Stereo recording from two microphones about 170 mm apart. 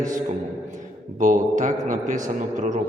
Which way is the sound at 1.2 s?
50° right (ahead or behind).